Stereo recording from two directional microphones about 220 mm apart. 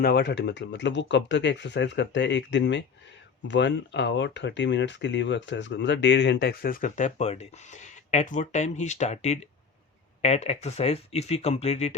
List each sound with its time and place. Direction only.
0.0 s speech: 50° left (ahead or behind); by 11.9 s 30° left (ahead or behind)